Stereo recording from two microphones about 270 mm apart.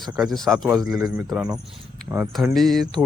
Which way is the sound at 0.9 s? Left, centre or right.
Centre.